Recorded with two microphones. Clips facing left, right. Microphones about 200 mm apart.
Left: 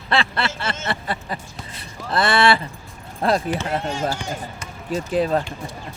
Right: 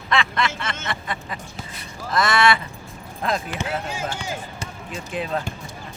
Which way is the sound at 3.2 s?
35° left (ahead or behind).